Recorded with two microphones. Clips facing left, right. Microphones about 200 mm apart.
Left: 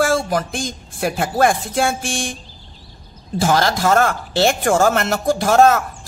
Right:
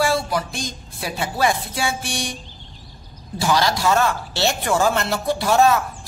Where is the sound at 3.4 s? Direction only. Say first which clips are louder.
Left 3 dB; 50° left (ahead or behind).